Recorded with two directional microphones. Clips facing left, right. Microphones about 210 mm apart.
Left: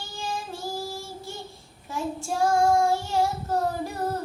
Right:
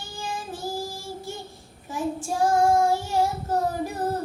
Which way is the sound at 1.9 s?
15° right (ahead or behind).